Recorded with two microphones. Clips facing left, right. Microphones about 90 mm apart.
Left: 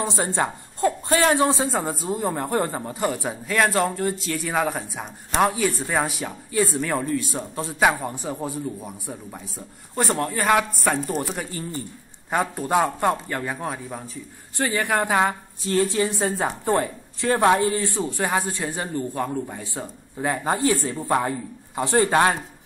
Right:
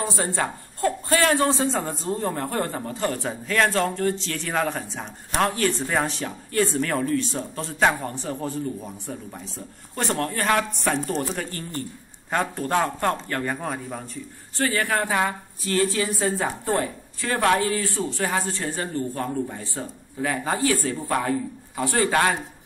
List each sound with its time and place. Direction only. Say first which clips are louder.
0.0 s speech: left 2 dB; 20° left (ahead or behind); by 14.2 s 5° left (ahead or behind)
14.6 s a man's voice: left 1 dB; 20° left (ahead or behind)